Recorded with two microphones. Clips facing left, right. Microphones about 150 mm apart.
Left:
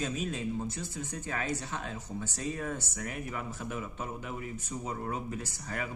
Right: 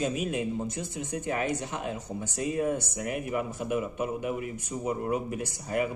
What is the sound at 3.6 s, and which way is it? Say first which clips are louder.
Speech: right 8 dB; 60° right (ahead or behind).